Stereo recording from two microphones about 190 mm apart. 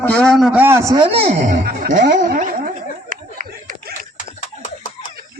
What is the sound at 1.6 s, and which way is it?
Speech, 50° right (ahead or behind).